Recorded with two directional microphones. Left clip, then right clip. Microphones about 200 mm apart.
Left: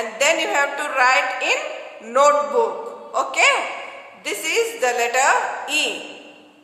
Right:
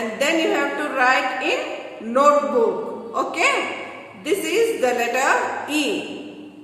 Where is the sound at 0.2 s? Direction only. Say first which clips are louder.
Left 2 dB; 45° left (ahead or behind).